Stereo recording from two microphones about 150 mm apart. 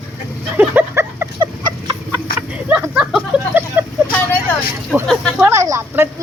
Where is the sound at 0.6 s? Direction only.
15° right (ahead or behind).